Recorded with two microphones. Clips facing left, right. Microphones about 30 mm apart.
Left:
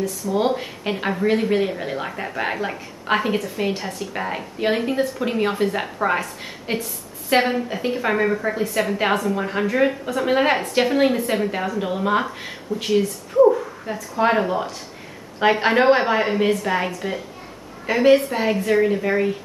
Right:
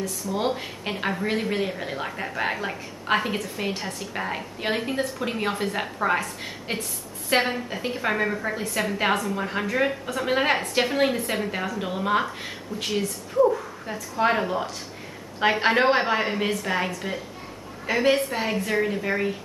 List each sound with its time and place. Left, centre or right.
0.0 s speech: centre